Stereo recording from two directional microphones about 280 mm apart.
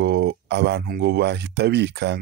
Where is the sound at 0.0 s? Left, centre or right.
Right.